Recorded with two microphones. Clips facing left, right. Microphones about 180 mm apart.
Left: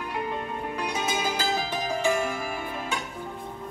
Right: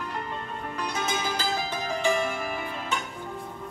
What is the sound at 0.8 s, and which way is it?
Music, 15° left (ahead or behind).